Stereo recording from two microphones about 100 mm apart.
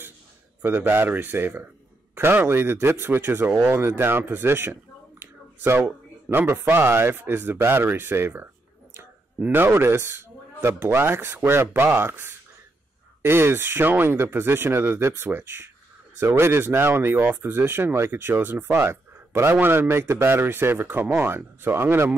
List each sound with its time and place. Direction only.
0.6 s speech: 20° right (ahead or behind)
5.2 s a sound: 25° right (ahead or behind)
6.2 s speech: 25° right (ahead or behind)